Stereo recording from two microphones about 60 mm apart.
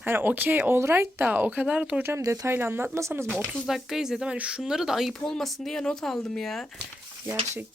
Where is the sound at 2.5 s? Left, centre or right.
Right.